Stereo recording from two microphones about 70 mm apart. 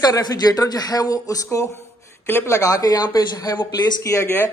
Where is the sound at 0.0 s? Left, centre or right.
Left.